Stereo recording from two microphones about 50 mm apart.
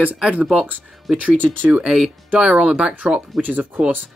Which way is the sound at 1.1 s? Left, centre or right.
Right.